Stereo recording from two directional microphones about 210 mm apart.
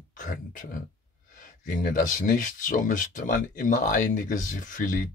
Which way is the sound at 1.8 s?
40° left (ahead or behind).